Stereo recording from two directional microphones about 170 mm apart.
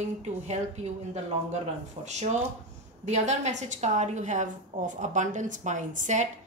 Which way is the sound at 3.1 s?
45° right (ahead or behind).